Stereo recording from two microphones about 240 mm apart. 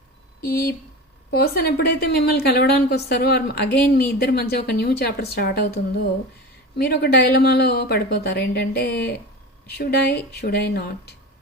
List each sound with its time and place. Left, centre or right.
0.4 s a woman's voice: left